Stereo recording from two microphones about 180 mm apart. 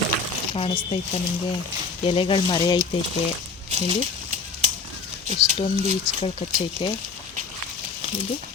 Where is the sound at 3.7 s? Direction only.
35° right (ahead or behind).